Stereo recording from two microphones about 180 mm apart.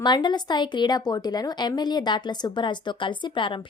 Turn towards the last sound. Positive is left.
turn(degrees=25)  # may be behind; listen again after turning